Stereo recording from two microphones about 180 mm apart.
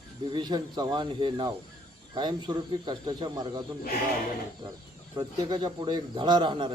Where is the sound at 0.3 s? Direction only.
25° right (ahead or behind).